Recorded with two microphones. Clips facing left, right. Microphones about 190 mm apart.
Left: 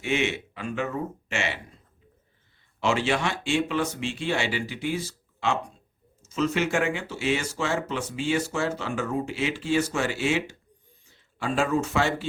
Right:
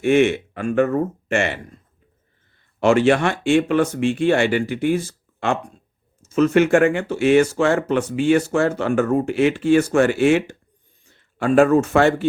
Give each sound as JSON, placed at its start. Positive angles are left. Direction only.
{"t": 0.0, "sound": "speech", "side_deg": -55}
{"t": 2.8, "sound": "speech", "side_deg": -55}